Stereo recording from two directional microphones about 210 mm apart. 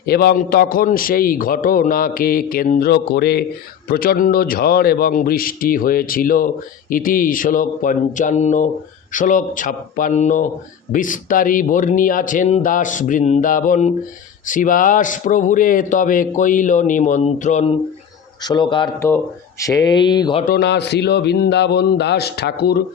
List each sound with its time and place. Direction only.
0.0 s a man's voice: 50° left (ahead or behind)
18.4 s speech: 20° left (ahead or behind)
20.4 s a man's voice: 50° left (ahead or behind)